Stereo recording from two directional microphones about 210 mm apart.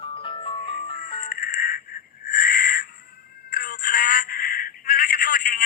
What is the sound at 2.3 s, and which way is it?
Crow, 40° left (ahead or behind).